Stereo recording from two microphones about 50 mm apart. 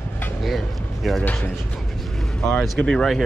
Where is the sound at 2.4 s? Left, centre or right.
Centre.